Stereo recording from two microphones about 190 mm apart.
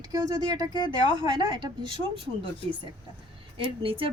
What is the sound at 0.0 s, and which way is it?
Speech, 20° right (ahead or behind).